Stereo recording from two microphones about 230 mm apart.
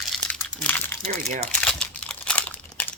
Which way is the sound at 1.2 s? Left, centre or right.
Right.